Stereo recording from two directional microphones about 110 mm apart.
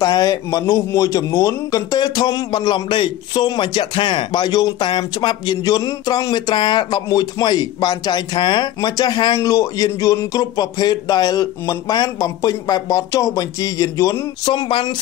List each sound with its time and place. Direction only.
0.0 s speech: 35° left (ahead or behind)
14.5 s speech: 50° left (ahead or behind)